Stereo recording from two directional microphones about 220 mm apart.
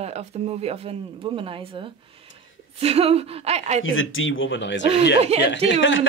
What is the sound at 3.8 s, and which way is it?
Speech, 65° left (ahead or behind).